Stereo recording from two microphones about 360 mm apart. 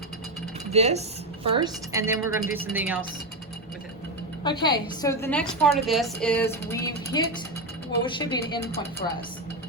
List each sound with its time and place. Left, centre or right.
0.7 s a woman's voice: centre
4.4 s a woman's voice: centre